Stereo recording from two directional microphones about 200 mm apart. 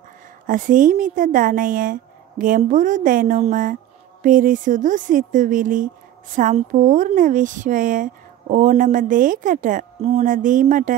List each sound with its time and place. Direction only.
0.5 s speech: 40° right (ahead or behind)